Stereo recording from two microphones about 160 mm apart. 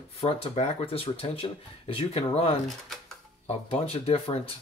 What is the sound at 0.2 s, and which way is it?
Speech, 40° left (ahead or behind).